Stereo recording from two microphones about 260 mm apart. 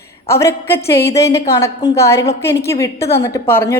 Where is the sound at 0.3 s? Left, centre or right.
Centre.